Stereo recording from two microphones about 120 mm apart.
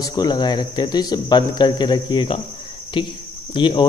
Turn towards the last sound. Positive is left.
turn(degrees=40)  # may be behind; listen again after turning